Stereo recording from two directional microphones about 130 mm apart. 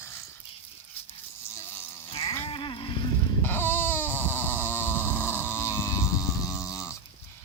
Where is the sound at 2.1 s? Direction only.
45° left (ahead or behind).